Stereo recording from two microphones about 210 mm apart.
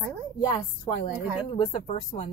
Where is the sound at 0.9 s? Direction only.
25° left (ahead or behind).